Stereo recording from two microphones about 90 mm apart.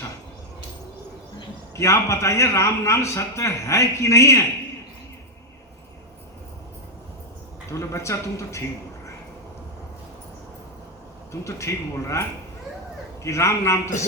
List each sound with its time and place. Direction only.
1.7 s a man's voice: 35° left (ahead or behind)
7.7 s a man's voice: 35° left (ahead or behind)
11.4 s a man's voice: 35° left (ahead or behind)
13.2 s a man's voice: 35° left (ahead or behind)